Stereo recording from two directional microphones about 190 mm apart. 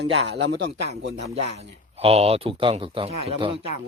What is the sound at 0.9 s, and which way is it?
Speech, 35° right (ahead or behind).